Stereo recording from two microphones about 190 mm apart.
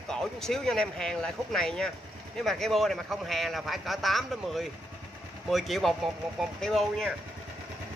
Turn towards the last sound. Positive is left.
turn(degrees=0)  # may be behind; listen again after turning